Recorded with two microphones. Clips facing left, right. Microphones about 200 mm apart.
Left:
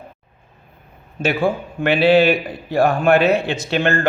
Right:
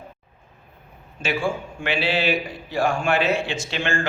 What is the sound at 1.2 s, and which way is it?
A man's voice, 60° left (ahead or behind).